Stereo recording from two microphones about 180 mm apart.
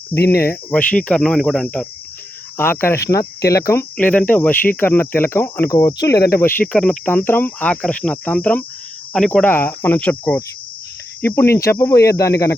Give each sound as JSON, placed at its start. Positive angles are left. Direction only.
{"t": 0.3, "sound": "cricket", "side_deg": 60}
{"t": 0.7, "sound": "cricket", "side_deg": 5}